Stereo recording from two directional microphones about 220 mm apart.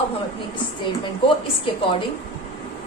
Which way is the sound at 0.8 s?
25° left (ahead or behind).